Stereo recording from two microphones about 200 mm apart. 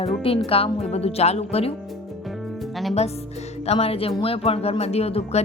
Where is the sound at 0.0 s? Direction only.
30° left (ahead or behind).